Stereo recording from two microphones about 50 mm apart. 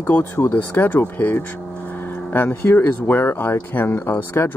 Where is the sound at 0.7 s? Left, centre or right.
Left.